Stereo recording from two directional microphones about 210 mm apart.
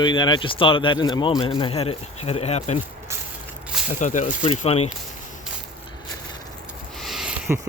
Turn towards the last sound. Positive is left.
turn(degrees=-10)  # may be behind; listen again after turning